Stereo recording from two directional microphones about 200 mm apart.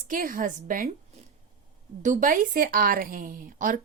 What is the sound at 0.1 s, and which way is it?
A woman's voice, 45° right (ahead or behind).